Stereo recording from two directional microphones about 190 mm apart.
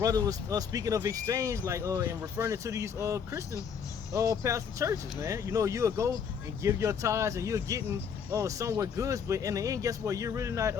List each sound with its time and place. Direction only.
0.0 s speech: 20° right (ahead or behind)